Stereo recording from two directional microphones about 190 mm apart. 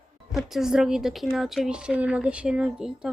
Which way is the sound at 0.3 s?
Centre (ahead or behind).